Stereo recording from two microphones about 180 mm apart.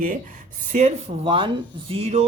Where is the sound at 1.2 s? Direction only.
30° right (ahead or behind).